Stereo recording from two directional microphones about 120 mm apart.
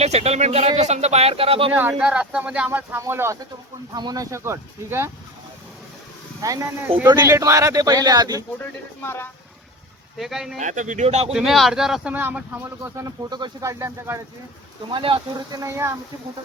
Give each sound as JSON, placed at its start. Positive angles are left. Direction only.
{"t": 0.0, "sound": "speech", "side_deg": -60}
{"t": 1.9, "sound": "speech", "side_deg": -10}
{"t": 3.9, "sound": "speech", "side_deg": -35}
{"t": 6.4, "sound": "speech", "side_deg": -25}
{"t": 9.0, "sound": "speech", "side_deg": 20}
{"t": 10.2, "sound": "speech", "side_deg": 0}
{"t": 10.6, "sound": "speech", "side_deg": -90}
{"t": 11.3, "sound": "speech", "side_deg": -5}
{"t": 12.1, "sound": "speech", "side_deg": -15}
{"t": 13.3, "sound": "speech", "side_deg": -35}
{"t": 13.7, "sound": "speech", "side_deg": -25}
{"t": 14.8, "sound": "speech", "side_deg": -45}
{"t": 15.5, "sound": "speech", "side_deg": -25}